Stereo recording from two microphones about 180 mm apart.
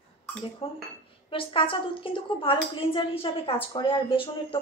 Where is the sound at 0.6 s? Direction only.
30° left (ahead or behind).